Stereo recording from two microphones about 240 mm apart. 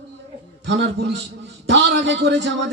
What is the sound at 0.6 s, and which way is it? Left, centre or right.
A man's voice, right.